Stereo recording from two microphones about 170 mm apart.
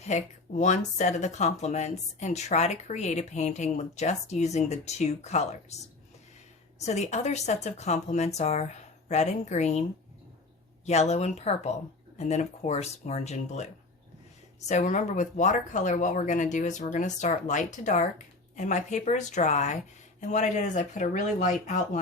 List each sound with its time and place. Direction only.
0.0 s speech: 40° left (ahead or behind)
6.7 s speech: 40° left (ahead or behind)
10.8 s speech: 40° left (ahead or behind)
14.7 s speech: 45° left (ahead or behind)